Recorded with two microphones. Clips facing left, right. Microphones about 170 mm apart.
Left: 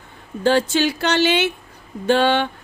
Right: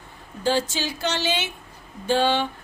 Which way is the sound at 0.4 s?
65° left (ahead or behind).